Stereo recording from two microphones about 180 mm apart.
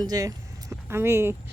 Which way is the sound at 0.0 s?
20° right (ahead or behind).